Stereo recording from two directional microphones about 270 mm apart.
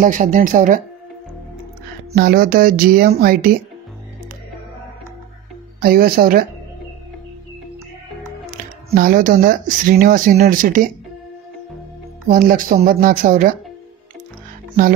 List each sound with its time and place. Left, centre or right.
0.0 s speech: right
2.1 s speech: right
5.8 s speech: right
8.5 s speech: right
12.3 s speech: right